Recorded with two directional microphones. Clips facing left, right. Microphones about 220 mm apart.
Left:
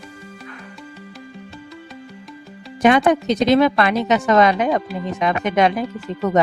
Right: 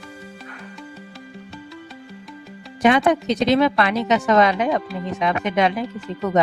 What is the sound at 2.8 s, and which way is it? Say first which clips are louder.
A woman's voice: left 2 dB; 45° left (ahead or behind).